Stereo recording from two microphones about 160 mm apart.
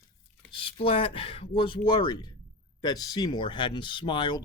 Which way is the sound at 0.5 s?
35° left (ahead or behind).